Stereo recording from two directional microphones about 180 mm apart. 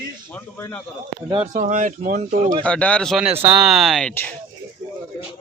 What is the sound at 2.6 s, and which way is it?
Speech, 5° left (ahead or behind).